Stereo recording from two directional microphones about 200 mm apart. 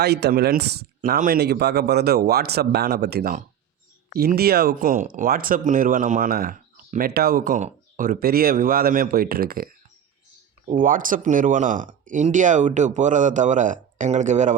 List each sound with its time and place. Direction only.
0.0 s speech: 55° right (ahead or behind)
10.7 s speech: 40° right (ahead or behind)